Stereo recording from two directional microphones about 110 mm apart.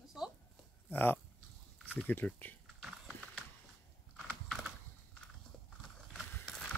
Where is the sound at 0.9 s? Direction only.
20° left (ahead or behind).